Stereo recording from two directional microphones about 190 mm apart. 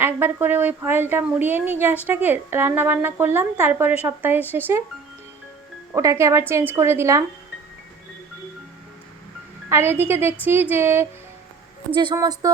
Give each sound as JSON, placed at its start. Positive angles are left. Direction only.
{"t": 0.0, "sound": "a woman's voice", "side_deg": -10}
{"t": 5.9, "sound": "a woman's voice", "side_deg": -15}
{"t": 9.6, "sound": "a woman's voice", "side_deg": -15}
{"t": 11.9, "sound": "speech", "side_deg": -25}